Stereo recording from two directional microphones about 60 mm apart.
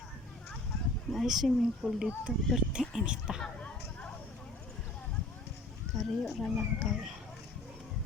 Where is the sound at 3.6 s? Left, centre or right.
Left.